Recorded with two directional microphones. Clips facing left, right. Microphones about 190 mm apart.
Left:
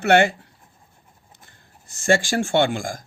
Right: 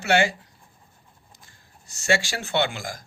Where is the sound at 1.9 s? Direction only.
50° left (ahead or behind).